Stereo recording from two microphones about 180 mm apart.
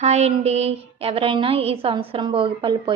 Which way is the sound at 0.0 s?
35° right (ahead or behind).